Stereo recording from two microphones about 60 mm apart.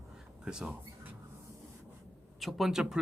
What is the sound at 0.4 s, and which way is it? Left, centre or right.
Speech, centre.